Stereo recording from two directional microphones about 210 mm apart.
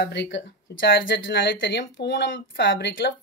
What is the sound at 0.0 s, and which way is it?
Speech, 55° left (ahead or behind).